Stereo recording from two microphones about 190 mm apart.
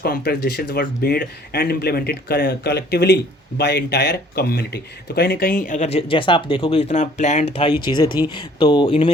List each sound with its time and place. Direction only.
0.0 s speech: 55° left (ahead or behind); by 9.0 s 25° left (ahead or behind)